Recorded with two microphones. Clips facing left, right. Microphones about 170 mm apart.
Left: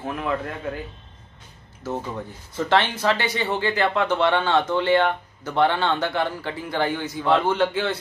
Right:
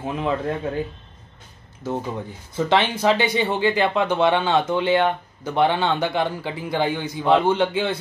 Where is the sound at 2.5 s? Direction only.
15° right (ahead or behind).